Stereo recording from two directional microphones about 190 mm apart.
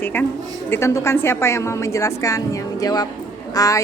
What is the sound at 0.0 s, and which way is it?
A woman's voice, 10° left (ahead or behind).